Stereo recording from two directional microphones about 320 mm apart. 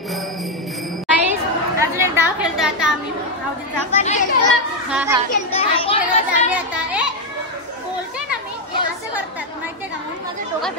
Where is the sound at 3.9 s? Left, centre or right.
Left.